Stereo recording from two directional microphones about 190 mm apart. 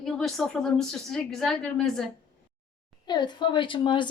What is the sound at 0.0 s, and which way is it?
A woman's voice, centre (ahead or behind).